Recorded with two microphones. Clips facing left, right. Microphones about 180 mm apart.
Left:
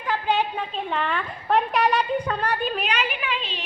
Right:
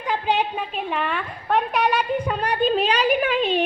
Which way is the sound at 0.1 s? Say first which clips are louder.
Right 1 dB; 15° right (ahead or behind).